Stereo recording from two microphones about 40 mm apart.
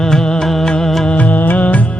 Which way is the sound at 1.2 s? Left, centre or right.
Left.